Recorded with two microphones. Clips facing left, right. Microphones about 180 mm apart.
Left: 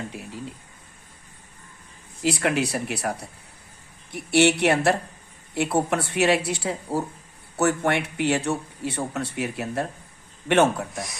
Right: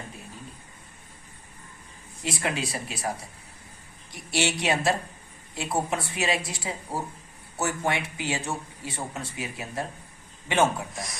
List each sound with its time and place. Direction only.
2.2 s speech: 70° left (ahead or behind)
10.9 s speech: centre (ahead or behind)